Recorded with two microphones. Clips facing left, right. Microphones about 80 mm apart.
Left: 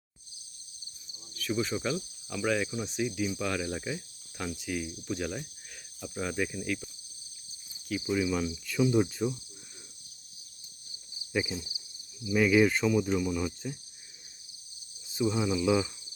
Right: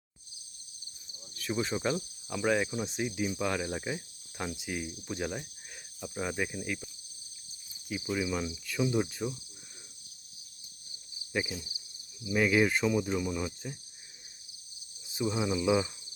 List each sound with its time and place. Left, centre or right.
1.4 s speech: right
2.4 s cricket: centre
6.0 s speech: centre
8.1 s speech: centre
11.3 s speech: centre
15.0 s speech: centre